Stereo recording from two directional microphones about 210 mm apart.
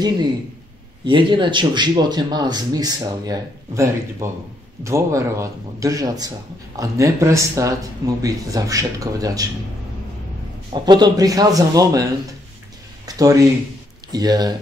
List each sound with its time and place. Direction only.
1.0 s a man's voice: 25° right (ahead or behind)
10.7 s a man's voice: 20° right (ahead or behind)
13.0 s a sound: 15° right (ahead or behind)
14.1 s speech: 20° right (ahead or behind)